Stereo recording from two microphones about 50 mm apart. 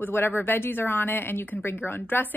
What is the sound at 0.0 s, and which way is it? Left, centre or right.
Speech, left.